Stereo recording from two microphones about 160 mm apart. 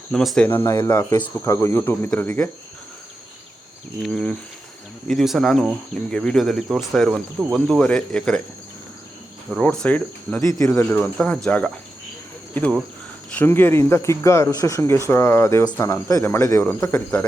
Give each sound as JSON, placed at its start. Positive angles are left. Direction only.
{"t": 0.1, "sound": "speech", "side_deg": 0}
{"t": 0.4, "sound": "speech", "side_deg": 15}
{"t": 4.0, "sound": "speech", "side_deg": 5}
{"t": 9.6, "sound": "speech", "side_deg": 10}
{"t": 10.4, "sound": "speech", "side_deg": 20}
{"t": 13.3, "sound": "speech", "side_deg": 15}